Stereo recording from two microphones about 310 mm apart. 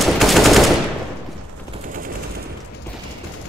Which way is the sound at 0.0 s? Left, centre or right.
Centre.